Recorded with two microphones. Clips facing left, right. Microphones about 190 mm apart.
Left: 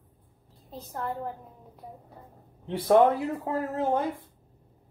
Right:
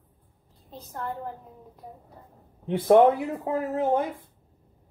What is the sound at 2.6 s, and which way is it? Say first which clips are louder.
Speech: right 3 dB; 20° right (ahead or behind).